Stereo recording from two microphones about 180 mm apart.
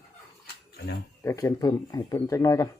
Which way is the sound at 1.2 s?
15° left (ahead or behind).